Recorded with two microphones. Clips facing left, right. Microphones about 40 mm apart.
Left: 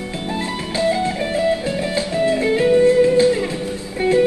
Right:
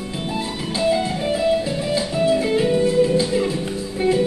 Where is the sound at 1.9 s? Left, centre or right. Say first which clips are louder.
Right 1 dB; left.